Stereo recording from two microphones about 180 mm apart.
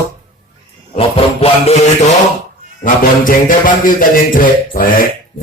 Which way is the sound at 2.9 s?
50° left (ahead or behind).